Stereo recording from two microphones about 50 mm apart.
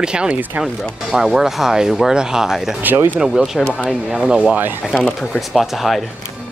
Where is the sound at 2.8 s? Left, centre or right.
Right.